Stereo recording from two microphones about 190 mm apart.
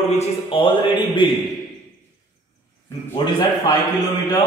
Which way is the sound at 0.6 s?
25° left (ahead or behind).